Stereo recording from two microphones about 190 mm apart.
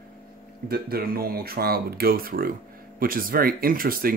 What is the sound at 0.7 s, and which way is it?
Speech, 50° right (ahead or behind).